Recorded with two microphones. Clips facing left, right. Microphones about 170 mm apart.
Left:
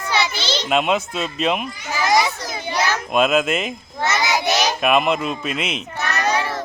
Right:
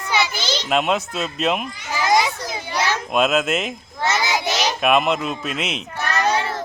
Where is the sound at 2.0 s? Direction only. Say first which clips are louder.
Even; 25° right (ahead or behind).